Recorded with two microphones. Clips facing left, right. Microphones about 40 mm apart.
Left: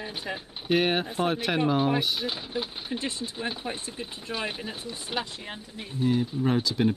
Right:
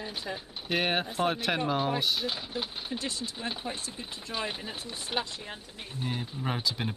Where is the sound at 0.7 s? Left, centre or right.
Centre.